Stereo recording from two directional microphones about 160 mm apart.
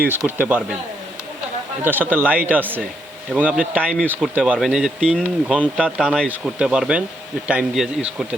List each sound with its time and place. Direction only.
0.3 s speech: 10° right (ahead or behind)
1.8 s speech: 10° right (ahead or behind)
4.0 s speech: 5° left (ahead or behind)
4.4 s speech: 5° right (ahead or behind)